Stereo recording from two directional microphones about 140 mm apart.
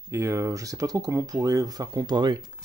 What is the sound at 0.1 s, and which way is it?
Speech, 20° right (ahead or behind).